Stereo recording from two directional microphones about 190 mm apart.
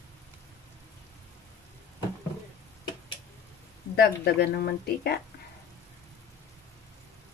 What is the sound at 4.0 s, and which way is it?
A woman's voice, 60° left (ahead or behind).